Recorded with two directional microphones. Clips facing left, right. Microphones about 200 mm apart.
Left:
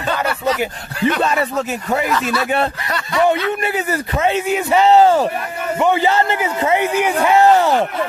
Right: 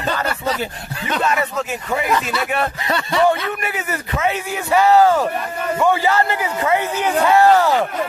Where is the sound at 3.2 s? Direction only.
25° left (ahead or behind).